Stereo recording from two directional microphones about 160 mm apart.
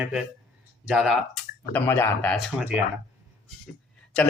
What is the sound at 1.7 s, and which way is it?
Speech, 10° left (ahead or behind).